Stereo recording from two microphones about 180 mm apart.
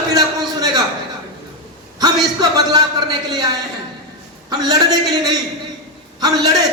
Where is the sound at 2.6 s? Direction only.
20° right (ahead or behind).